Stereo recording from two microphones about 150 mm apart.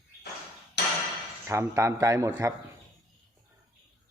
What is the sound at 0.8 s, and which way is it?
Hammer, 90° left.